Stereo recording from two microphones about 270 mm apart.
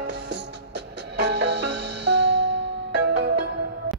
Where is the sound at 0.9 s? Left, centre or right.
Right.